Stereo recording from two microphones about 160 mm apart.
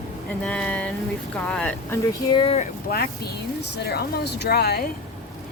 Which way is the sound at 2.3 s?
40° left (ahead or behind).